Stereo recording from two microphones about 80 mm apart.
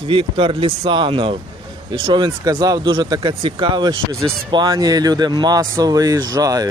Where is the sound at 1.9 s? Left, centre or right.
Right.